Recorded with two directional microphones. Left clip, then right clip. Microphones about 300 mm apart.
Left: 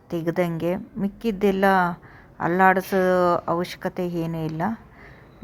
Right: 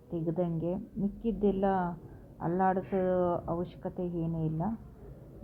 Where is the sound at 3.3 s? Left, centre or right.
Left.